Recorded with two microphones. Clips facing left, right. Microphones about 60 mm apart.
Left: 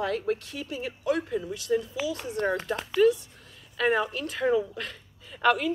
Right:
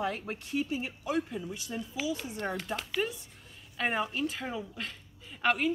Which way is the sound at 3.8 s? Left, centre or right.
Centre.